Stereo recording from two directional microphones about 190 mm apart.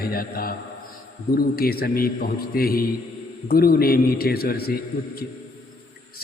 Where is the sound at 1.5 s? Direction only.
50° left (ahead or behind).